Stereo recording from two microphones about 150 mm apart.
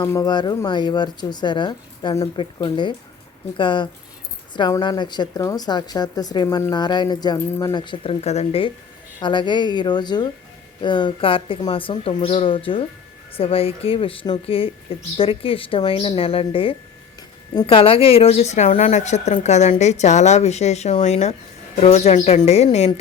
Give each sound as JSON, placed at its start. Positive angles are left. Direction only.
{"t": 0.0, "sound": "speech", "side_deg": 20}
{"t": 7.3, "sound": "speech", "side_deg": 15}
{"t": 7.7, "sound": "speech", "side_deg": 30}
{"t": 8.2, "sound": "a woman's voice", "side_deg": 45}
{"t": 9.2, "sound": "a woman's voice", "side_deg": 30}